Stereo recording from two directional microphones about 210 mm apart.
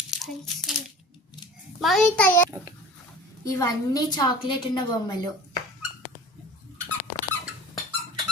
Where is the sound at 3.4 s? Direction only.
15° left (ahead or behind).